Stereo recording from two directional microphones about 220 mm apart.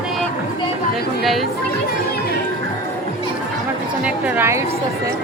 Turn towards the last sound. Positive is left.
turn(degrees=-10)  # may be behind; listen again after turning